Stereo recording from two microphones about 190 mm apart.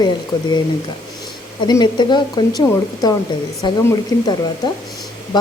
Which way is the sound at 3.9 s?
20° left (ahead or behind).